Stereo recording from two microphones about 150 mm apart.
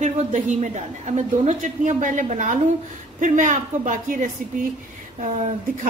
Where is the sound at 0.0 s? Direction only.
55° right (ahead or behind).